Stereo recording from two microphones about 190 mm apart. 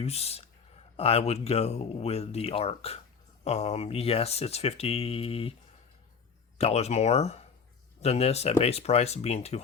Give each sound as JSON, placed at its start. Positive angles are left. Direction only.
{"t": 0.0, "sound": "speech", "side_deg": 35}
{"t": 6.6, "sound": "speech", "side_deg": 35}